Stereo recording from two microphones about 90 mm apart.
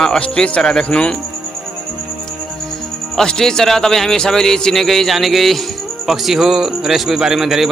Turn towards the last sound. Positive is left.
turn(degrees=-5)  # may be behind; listen again after turning